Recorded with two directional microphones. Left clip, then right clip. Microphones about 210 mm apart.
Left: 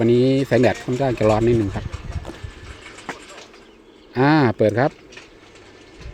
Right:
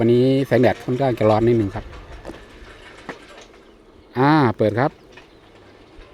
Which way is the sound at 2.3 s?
Centre (ahead or behind).